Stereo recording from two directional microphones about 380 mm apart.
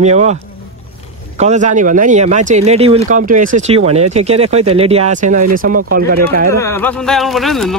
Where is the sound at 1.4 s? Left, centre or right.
Centre.